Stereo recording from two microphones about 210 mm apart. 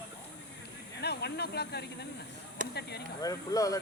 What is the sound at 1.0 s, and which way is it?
Speech, 50° left (ahead or behind).